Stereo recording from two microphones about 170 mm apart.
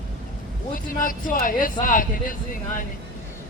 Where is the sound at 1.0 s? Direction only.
55° left (ahead or behind).